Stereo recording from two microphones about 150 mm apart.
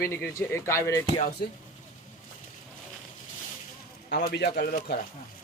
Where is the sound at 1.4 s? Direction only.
90° left.